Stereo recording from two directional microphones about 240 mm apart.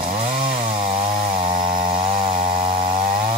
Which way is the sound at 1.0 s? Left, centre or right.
Centre.